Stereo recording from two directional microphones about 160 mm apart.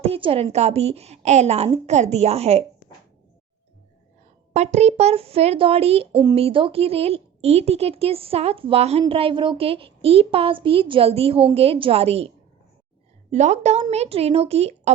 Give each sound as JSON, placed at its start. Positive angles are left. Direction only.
{"t": 0.1, "sound": "a woman's voice", "side_deg": -35}
{"t": 4.5, "sound": "a woman's voice", "side_deg": -45}
{"t": 13.3, "sound": "a woman's voice", "side_deg": -45}